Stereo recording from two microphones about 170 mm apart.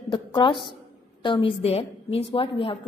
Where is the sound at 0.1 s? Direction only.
30° left (ahead or behind).